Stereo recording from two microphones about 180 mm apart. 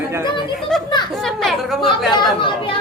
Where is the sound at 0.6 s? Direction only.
Centre (ahead or behind).